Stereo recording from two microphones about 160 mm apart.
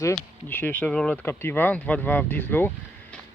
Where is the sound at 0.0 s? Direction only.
15° left (ahead or behind).